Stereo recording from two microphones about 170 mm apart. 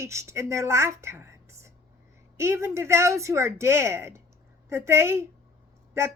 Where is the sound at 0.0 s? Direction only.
15° right (ahead or behind).